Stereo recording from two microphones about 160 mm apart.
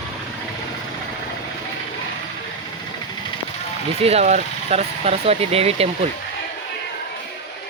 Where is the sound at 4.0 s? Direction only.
40° right (ahead or behind).